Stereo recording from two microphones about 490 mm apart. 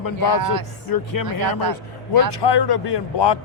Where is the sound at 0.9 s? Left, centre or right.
Left.